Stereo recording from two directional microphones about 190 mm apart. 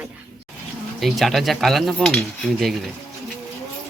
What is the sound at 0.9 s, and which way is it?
Speech, centre (ahead or behind).